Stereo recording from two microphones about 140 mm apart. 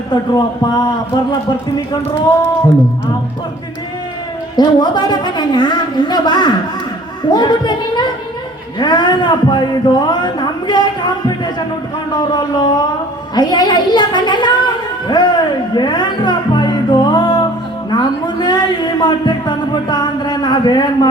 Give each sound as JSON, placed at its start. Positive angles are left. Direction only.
{"t": 0.1, "sound": "a man's voice", "side_deg": 30}
{"t": 4.5, "sound": "a man's voice", "side_deg": 30}